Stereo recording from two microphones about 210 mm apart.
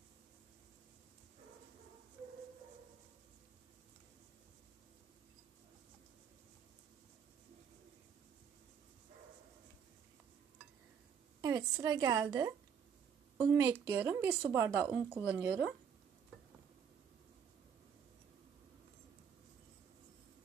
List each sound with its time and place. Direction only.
11.4 s speech: 15° right (ahead or behind)